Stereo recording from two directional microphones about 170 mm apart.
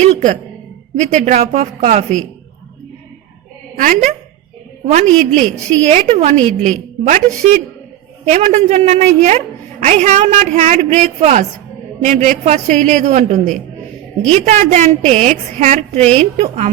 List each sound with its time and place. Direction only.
0.0 s a woman's voice: 45° right (ahead or behind)
3.8 s a woman's voice: 50° right (ahead or behind)
6.3 s a woman's voice: 5° left (ahead or behind)
6.6 s a woman's voice: 45° right (ahead or behind)